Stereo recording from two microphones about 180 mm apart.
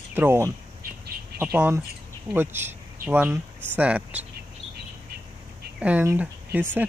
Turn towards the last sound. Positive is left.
turn(degrees=-10)  # may be behind; listen again after turning